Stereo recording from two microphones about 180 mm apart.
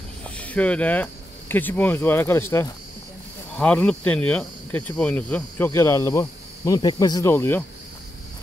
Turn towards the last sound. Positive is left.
turn(degrees=15)  # may be behind; listen again after turning